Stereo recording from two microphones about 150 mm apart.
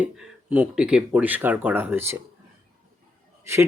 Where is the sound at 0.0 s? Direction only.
10° right (ahead or behind).